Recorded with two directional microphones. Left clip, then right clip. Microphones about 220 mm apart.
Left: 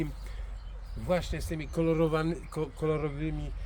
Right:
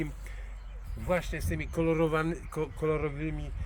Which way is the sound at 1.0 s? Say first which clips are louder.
Even; centre (ahead or behind).